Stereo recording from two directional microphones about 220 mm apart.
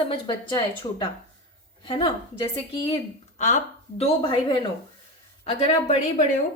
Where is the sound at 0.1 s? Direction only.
20° left (ahead or behind).